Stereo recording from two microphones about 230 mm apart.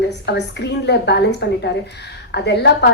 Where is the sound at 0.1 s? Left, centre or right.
Left.